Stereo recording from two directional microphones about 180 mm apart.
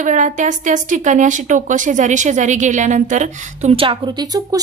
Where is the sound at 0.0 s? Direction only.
45° right (ahead or behind).